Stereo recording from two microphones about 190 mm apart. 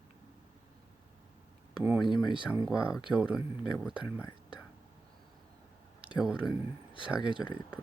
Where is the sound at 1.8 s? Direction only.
5° right (ahead or behind).